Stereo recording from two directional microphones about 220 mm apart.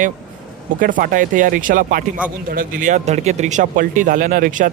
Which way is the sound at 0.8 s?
40° right (ahead or behind).